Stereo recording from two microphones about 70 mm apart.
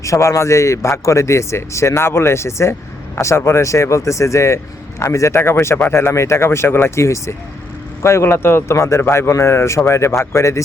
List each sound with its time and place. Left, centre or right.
0.0 s speech: left